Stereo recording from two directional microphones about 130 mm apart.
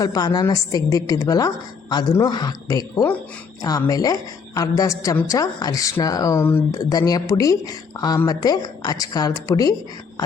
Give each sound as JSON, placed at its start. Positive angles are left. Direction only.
{"t": 0.0, "sound": "a woman's voice", "side_deg": 30}